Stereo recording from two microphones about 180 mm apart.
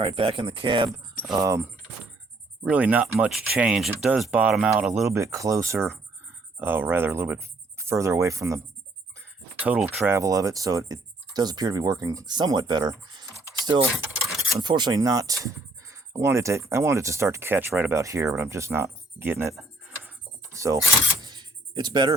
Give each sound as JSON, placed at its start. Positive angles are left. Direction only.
{"t": 0.0, "sound": "speech", "side_deg": -30}
{"t": 1.3, "sound": "speech", "side_deg": -20}
{"t": 2.6, "sound": "speech", "side_deg": -10}
{"t": 5.1, "sound": "speech", "side_deg": -15}
{"t": 13.4, "sound": "a sound", "side_deg": -25}
{"t": 14.5, "sound": "speech", "side_deg": -25}
{"t": 20.1, "sound": "a sound", "side_deg": -15}
{"t": 21.2, "sound": "music", "side_deg": -25}